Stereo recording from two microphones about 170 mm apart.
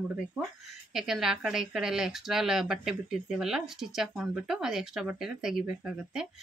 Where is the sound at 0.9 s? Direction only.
5° right (ahead or behind).